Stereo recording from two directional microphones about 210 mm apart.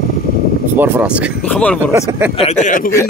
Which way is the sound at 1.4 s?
5° left (ahead or behind).